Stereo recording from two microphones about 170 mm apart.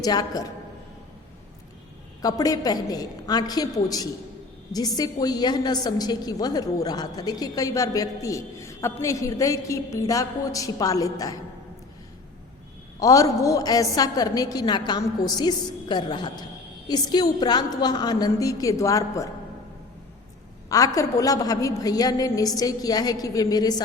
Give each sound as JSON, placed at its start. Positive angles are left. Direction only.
{"t": 0.0, "sound": "a woman's voice", "side_deg": 20}
{"t": 2.2, "sound": "a woman's voice", "side_deg": 20}
{"t": 13.0, "sound": "a woman's voice", "side_deg": 20}
{"t": 20.7, "sound": "a woman's voice", "side_deg": 20}